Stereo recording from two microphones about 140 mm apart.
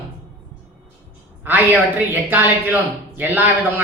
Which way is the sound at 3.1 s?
10° right (ahead or behind).